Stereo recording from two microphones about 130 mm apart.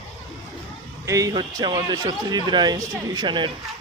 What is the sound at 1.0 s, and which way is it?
A man's voice, 25° right (ahead or behind).